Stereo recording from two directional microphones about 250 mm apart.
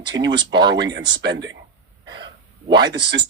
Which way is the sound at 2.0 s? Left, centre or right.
Right.